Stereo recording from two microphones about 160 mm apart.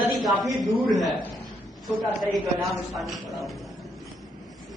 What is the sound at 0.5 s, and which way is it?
Speech, centre (ahead or behind).